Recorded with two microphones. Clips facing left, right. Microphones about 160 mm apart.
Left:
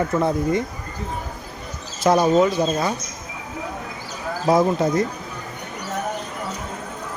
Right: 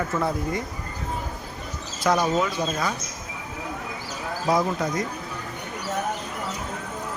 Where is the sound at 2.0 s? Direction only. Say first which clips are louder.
Left 6 dB; 25° left (ahead or behind).